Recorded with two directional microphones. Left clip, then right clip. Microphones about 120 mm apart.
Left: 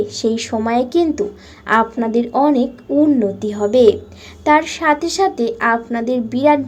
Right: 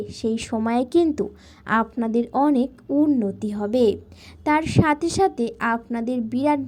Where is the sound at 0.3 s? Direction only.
45° right (ahead or behind).